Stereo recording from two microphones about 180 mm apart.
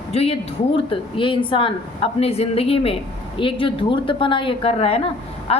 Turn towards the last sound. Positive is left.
turn(degrees=35)  # may be behind; listen again after turning